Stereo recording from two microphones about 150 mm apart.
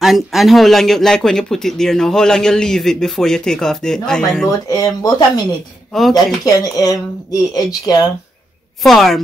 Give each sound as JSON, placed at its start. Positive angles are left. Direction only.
{"t": 0.0, "sound": "speech", "side_deg": 0}
{"t": 4.6, "sound": "speech", "side_deg": 25}
{"t": 8.8, "sound": "speech", "side_deg": 0}